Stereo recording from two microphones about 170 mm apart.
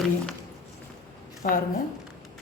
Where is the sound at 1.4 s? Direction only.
50° left (ahead or behind).